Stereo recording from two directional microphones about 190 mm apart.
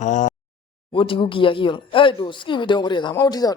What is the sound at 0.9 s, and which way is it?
A man's voice, 25° left (ahead or behind).